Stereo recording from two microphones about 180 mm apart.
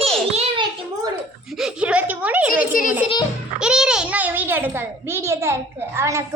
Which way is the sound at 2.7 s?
50° left (ahead or behind).